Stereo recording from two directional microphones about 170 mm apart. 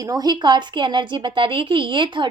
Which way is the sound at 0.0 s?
20° right (ahead or behind).